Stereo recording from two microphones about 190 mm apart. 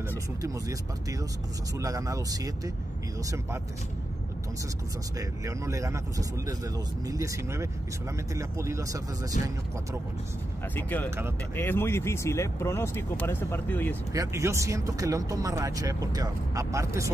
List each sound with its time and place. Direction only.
1.8 s speech: 15° right (ahead or behind)
5.4 s speech: 15° right (ahead or behind)
10.8 s speech: 10° left (ahead or behind)
11.1 s speech: 10° right (ahead or behind)
11.5 s speech: 10° left (ahead or behind)
14.1 s speech: 15° right (ahead or behind)